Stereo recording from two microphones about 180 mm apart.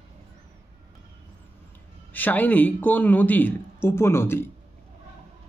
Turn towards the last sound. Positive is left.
turn(degrees=15)  # may be behind; listen again after turning